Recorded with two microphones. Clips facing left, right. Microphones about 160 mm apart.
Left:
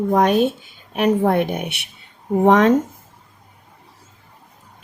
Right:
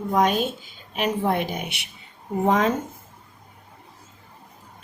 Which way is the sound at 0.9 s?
55° left (ahead or behind).